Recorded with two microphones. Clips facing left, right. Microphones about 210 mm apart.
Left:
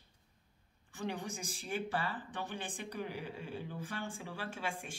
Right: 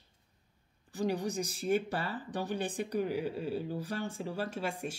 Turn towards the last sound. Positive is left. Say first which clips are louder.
# right 5 dB
turn(degrees=-40)  # may be behind; listen again after turning